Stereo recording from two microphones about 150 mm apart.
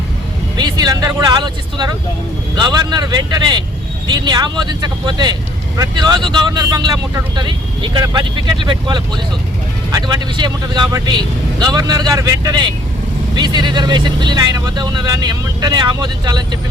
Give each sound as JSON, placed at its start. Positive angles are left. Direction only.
{"t": 0.5, "sound": "speech", "side_deg": -25}